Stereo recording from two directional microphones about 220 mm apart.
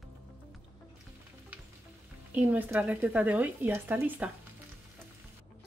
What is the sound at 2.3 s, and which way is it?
Speech, 5° right (ahead or behind).